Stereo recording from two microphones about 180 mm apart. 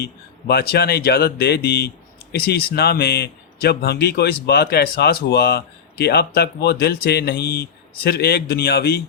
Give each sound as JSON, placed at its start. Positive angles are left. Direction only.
{"t": 0.0, "sound": "speech", "side_deg": 60}